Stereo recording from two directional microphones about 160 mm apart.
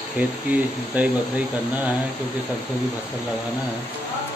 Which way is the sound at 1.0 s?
10° right (ahead or behind).